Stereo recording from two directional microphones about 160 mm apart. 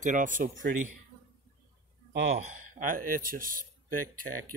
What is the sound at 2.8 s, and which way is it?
Speech, 60° right (ahead or behind).